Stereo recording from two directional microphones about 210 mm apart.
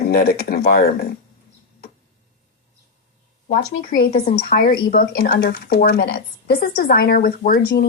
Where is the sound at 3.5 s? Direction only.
45° left (ahead or behind).